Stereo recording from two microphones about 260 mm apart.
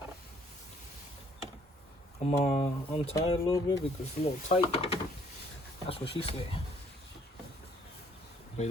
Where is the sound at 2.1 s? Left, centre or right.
Left.